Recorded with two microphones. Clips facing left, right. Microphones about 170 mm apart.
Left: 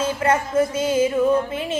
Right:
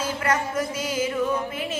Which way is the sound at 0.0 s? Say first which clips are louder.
Left 5 dB; 25° left (ahead or behind).